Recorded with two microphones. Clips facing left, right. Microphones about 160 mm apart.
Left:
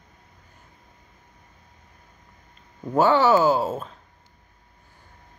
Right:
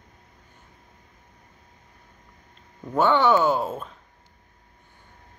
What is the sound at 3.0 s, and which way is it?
Speech, 5° left (ahead or behind).